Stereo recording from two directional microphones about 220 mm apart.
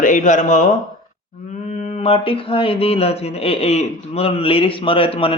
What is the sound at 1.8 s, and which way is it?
A man's voice, 30° left (ahead or behind).